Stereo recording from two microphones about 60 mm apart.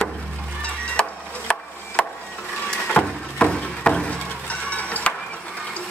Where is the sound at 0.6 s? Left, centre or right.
Centre.